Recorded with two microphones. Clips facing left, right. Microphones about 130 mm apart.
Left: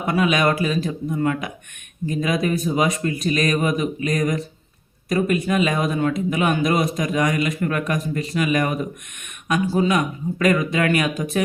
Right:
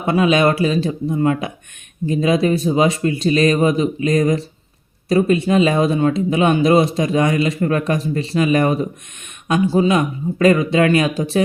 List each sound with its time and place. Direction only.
0.0 s a man's voice: 30° right (ahead or behind)